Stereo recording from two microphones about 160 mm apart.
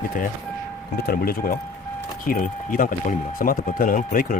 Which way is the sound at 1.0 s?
70° left (ahead or behind).